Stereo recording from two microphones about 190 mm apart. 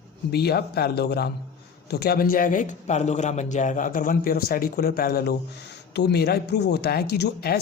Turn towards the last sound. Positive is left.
turn(degrees=55)  # may be behind; listen again after turning